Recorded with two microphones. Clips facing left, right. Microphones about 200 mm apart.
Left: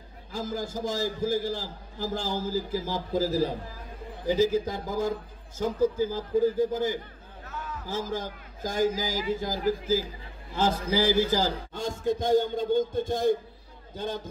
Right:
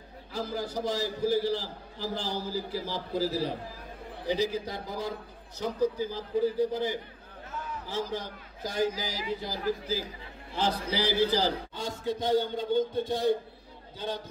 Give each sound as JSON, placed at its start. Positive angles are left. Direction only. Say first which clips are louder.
{"t": 0.3, "sound": "a man's voice", "louder": "left 1 dB", "side_deg": 45}